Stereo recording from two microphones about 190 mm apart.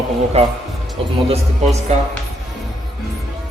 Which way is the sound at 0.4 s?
30° right (ahead or behind).